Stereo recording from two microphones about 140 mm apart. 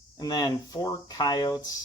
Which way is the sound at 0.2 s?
30° left (ahead or behind).